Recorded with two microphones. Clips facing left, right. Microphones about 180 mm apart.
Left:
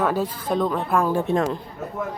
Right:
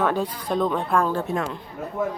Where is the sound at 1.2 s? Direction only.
35° left (ahead or behind).